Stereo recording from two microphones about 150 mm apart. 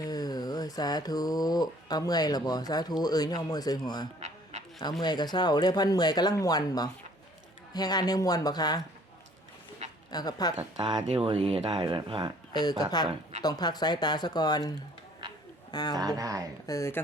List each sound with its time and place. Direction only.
0.0 s speech: 25° left (ahead or behind)
10.1 s speech: 25° left (ahead or behind)
10.8 s speech: 25° right (ahead or behind)
11.1 s speech: 40° right (ahead or behind)
12.8 s speech: 25° left (ahead or behind)
15.7 s speech: 25° left (ahead or behind)
16.0 s speech: 25° right (ahead or behind)
16.6 s speech: 20° left (ahead or behind)